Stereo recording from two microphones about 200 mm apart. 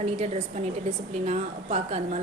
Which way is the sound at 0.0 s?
35° right (ahead or behind).